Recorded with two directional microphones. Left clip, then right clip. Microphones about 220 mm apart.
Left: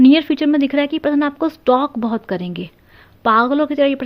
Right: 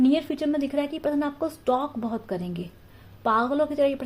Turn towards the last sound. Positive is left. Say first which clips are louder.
# left 7 dB
turn(degrees=35)  # may be behind; listen again after turning